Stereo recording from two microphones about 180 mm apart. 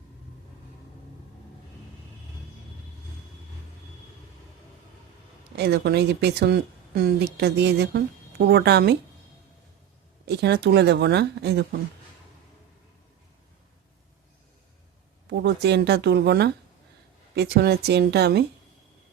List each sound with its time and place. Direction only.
5.5 s speech: 65° right (ahead or behind)
10.2 s speech: 70° right (ahead or behind)
15.3 s speech: 70° right (ahead or behind)